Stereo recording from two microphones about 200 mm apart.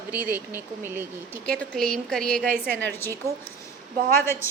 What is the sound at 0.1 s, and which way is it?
Speech, 10° right (ahead or behind).